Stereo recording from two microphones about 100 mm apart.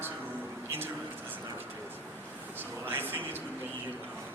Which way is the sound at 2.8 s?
20° right (ahead or behind).